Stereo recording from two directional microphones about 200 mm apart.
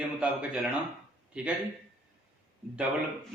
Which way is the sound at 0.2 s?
5° right (ahead or behind).